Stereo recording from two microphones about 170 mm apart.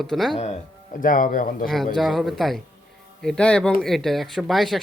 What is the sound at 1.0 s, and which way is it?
Speech, 55° left (ahead or behind).